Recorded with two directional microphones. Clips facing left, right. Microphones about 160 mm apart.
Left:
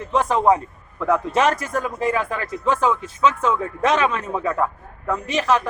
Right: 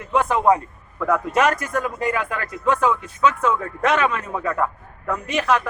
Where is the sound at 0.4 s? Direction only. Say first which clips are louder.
Even; 10° left (ahead or behind).